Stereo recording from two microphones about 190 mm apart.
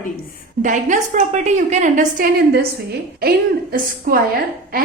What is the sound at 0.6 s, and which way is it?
A woman's voice, 40° right (ahead or behind).